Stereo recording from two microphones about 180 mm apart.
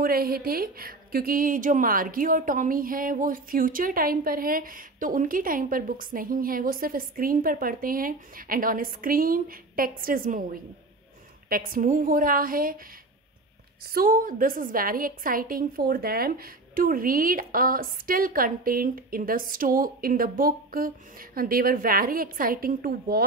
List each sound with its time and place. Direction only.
0.0 s speech: 55° right (ahead or behind)
13.9 s speech: 50° right (ahead or behind)